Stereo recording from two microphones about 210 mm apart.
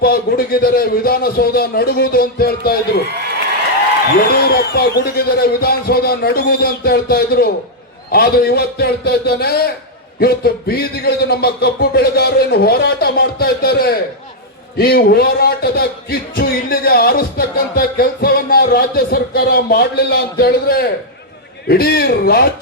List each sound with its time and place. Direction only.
0.0 s speech: 45° left (ahead or behind)
4.3 s speech: 50° left (ahead or behind)